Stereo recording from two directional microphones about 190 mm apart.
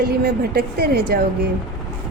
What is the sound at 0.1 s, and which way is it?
A woman's voice, 55° right (ahead or behind).